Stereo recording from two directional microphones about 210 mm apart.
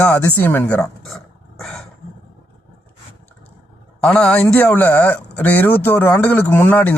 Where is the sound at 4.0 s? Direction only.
5° left (ahead or behind).